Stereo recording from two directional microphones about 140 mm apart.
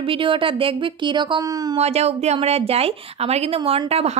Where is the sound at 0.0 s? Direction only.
40° right (ahead or behind).